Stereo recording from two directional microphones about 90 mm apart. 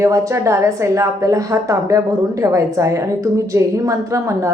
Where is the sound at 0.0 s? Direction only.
40° right (ahead or behind).